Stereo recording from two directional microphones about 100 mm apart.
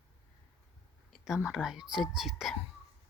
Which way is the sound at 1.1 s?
5° right (ahead or behind).